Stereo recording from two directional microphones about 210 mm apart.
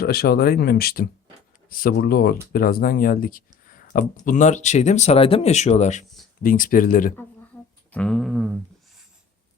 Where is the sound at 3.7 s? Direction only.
40° left (ahead or behind).